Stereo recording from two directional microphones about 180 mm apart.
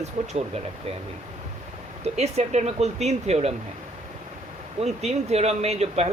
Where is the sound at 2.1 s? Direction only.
35° right (ahead or behind).